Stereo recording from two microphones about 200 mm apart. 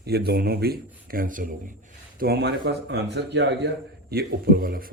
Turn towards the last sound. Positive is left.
turn(degrees=-50)  # may be behind; listen again after turning